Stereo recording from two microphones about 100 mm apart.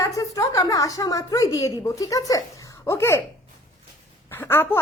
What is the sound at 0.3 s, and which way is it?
A woman's voice, 35° left (ahead or behind).